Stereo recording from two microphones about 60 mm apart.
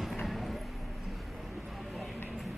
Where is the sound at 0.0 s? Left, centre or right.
Centre.